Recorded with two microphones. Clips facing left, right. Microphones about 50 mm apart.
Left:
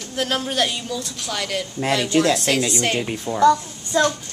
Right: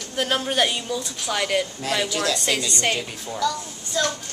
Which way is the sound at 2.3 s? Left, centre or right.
Centre.